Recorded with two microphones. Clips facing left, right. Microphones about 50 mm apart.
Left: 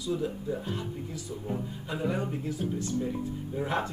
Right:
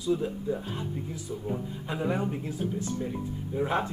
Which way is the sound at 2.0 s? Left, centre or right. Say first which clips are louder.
Right 2 dB; centre.